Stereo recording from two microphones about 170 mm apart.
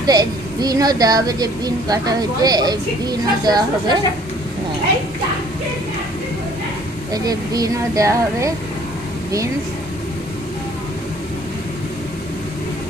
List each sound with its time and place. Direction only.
0.0 s a woman's voice: 25° right (ahead or behind)
7.1 s a woman's voice: 20° right (ahead or behind)